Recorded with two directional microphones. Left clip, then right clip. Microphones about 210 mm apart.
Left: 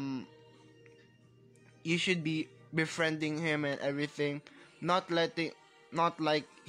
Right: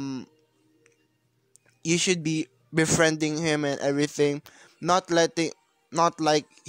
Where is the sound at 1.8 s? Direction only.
55° right (ahead or behind).